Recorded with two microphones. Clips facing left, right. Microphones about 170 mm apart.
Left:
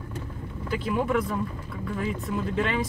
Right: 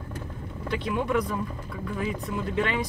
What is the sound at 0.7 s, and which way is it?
Speech, 5° left (ahead or behind).